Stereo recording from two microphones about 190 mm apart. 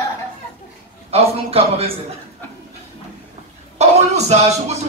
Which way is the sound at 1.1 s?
30° right (ahead or behind).